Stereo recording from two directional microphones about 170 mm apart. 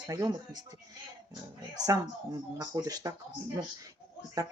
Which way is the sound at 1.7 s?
20° right (ahead or behind).